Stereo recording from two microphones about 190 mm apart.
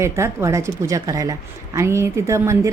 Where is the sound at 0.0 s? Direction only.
15° right (ahead or behind).